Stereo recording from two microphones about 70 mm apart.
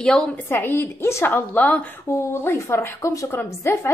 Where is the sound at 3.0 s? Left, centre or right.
Left.